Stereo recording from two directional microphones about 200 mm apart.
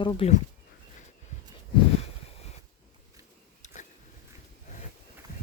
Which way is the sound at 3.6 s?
35° left (ahead or behind).